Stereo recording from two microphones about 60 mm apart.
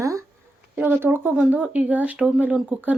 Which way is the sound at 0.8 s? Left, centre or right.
Right.